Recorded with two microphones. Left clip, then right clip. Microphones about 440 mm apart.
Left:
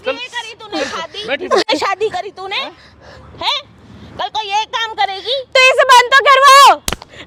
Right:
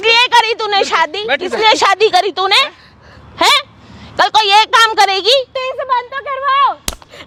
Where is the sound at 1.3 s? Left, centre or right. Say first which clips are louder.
Even; left.